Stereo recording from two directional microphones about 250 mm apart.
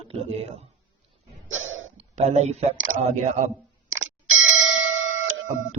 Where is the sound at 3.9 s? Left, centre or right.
Right.